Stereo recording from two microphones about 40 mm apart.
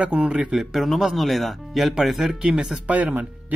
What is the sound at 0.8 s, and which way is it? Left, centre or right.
Speech, centre.